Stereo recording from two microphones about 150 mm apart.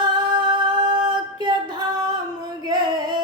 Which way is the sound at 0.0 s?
30° right (ahead or behind).